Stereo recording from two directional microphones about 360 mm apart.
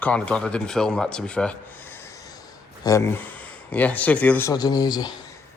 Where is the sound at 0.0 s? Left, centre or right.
Centre.